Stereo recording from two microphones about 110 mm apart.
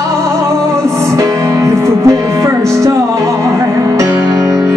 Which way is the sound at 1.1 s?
30° right (ahead or behind).